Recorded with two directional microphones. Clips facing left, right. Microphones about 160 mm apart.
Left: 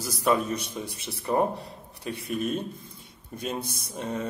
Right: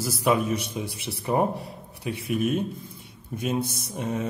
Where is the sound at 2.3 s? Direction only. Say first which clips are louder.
Right 4 dB; 55° right (ahead or behind).